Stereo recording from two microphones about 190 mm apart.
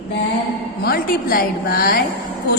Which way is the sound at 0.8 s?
50° left (ahead or behind).